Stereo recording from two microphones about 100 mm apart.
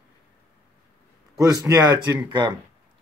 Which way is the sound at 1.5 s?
40° right (ahead or behind).